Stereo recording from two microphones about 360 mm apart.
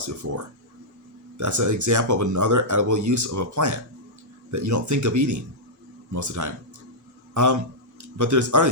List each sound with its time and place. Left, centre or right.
0.0 s speech: right